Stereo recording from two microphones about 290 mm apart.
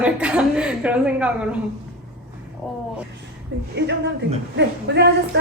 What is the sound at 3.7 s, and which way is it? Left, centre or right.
Speech, right.